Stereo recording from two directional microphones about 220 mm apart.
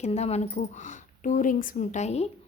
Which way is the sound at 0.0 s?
30° left (ahead or behind).